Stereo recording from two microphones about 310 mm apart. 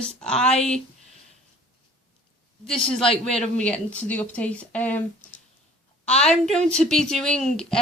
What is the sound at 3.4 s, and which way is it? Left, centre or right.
A woman's voice, centre.